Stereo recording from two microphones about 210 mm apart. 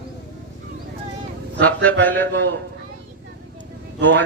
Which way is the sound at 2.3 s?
55° right (ahead or behind).